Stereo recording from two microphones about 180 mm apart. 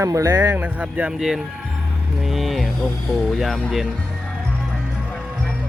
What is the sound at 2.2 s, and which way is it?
Mantra, centre (ahead or behind).